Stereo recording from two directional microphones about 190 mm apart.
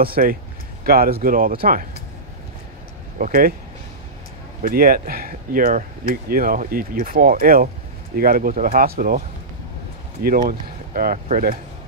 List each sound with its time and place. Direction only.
0.0 s speech: 50° right (ahead or behind)
3.2 s speech: 45° right (ahead or behind)
4.6 s speech: 50° right (ahead or behind)
10.2 s speech: 45° right (ahead or behind)